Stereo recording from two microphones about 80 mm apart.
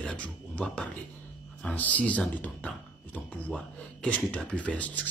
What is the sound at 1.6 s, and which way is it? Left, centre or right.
Speech, centre.